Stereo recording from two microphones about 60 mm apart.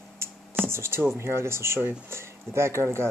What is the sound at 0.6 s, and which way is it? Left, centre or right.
Speech, right.